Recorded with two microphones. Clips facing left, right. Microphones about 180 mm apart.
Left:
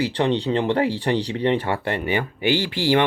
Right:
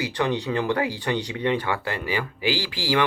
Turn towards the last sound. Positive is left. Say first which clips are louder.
# left 5 dB
turn(degrees=25)  # may be behind; listen again after turning